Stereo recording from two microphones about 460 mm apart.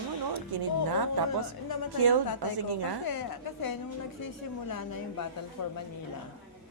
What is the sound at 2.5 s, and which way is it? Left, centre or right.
Speech, right.